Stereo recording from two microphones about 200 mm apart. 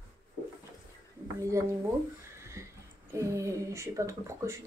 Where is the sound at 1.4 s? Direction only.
15° right (ahead or behind).